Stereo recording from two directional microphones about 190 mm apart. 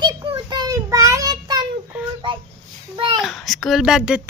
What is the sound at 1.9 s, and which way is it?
Speech, 5° right (ahead or behind).